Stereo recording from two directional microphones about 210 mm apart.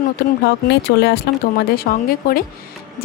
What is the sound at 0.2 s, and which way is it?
Speech, 50° left (ahead or behind).